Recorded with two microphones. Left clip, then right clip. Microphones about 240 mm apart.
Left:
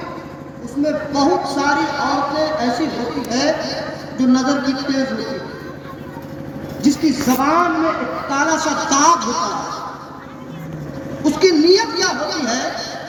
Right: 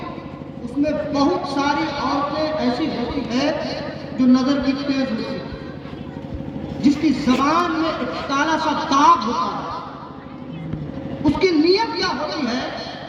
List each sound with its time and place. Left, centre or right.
0.8 s a woman's voice: right
6.8 s a woman's voice: right
11.3 s a woman's voice: right